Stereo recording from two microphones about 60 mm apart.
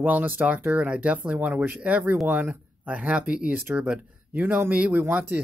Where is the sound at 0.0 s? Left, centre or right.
Right.